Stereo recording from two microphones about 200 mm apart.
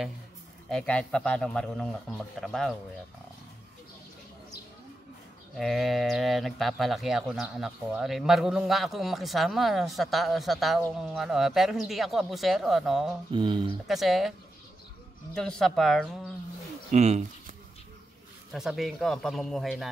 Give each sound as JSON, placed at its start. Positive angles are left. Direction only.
{"t": 0.7, "sound": "speech", "side_deg": 5}
{"t": 5.6, "sound": "speech", "side_deg": 0}
{"t": 13.3, "sound": "speech", "side_deg": -25}
{"t": 13.8, "sound": "speech", "side_deg": 0}
{"t": 15.3, "sound": "speech", "side_deg": 5}
{"t": 16.9, "sound": "speech", "side_deg": -35}
{"t": 18.5, "sound": "speech", "side_deg": 0}